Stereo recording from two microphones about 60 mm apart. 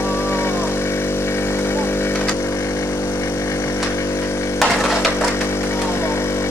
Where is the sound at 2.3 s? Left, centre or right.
Left.